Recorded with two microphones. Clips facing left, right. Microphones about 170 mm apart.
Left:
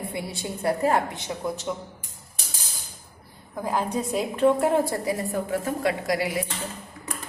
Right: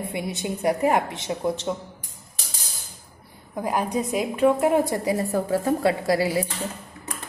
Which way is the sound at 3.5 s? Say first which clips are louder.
Right 2 dB; 15° right (ahead or behind).